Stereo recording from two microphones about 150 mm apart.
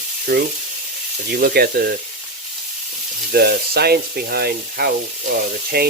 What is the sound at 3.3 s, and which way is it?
Speech, 90° right.